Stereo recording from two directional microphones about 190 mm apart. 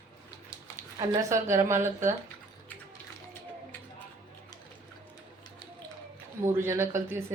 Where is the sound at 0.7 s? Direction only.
15° right (ahead or behind).